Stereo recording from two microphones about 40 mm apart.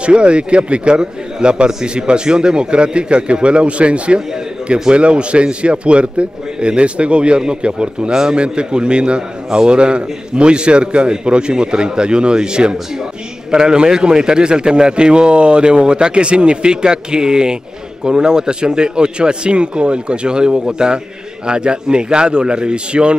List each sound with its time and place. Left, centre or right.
0.0 s a man's voice: right